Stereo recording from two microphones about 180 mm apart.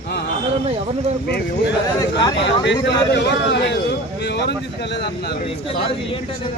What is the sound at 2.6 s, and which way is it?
A man's voice, 75° left (ahead or behind).